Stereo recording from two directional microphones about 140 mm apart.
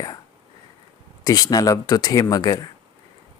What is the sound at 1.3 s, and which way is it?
Speech, 25° left (ahead or behind).